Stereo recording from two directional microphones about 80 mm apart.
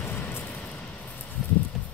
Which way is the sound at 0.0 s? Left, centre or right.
Left.